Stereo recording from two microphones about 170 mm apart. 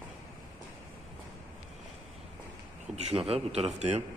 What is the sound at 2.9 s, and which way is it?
A man's voice, 35° right (ahead or behind).